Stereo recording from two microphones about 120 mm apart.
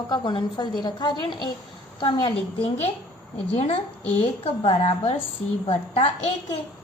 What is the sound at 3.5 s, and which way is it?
A woman's voice, 60° left (ahead or behind).